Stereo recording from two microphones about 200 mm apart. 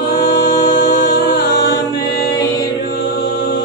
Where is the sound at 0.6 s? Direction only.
45° left (ahead or behind).